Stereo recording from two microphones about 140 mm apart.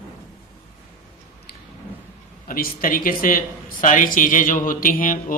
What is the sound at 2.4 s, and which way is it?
Speech, 85° left.